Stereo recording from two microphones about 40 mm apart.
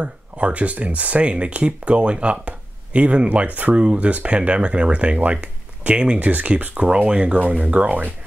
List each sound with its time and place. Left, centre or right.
0.0 s speech: right
3.7 s speech: right
7.0 s speech: right